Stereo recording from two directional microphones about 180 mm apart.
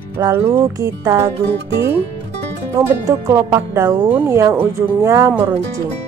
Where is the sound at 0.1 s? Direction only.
15° right (ahead or behind).